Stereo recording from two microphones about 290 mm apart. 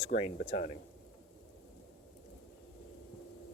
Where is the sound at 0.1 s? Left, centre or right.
Left.